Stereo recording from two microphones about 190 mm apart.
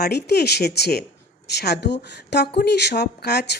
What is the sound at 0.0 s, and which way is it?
Speech, 60° left (ahead or behind).